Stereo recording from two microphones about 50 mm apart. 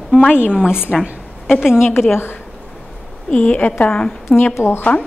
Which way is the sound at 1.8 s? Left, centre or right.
Left.